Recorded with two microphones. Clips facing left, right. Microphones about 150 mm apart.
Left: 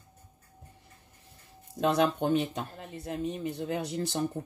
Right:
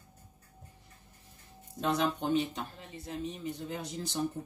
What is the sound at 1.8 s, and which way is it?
Speech, 60° left (ahead or behind).